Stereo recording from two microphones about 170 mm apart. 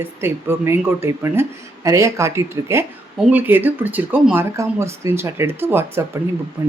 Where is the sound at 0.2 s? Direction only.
15° right (ahead or behind).